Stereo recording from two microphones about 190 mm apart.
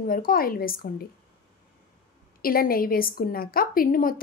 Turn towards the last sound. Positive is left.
turn(degrees=50)  # may be behind; listen again after turning